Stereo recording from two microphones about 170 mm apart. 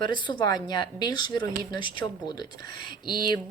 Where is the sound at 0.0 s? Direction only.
25° left (ahead or behind).